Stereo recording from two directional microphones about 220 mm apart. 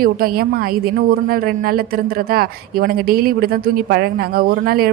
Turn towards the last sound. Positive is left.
turn(degrees=-45)  # may be behind; listen again after turning